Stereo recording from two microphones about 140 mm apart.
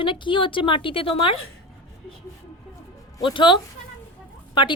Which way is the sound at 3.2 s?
35° left (ahead or behind).